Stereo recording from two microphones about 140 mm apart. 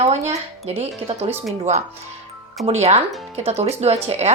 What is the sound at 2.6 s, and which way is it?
A woman's voice, 50° right (ahead or behind).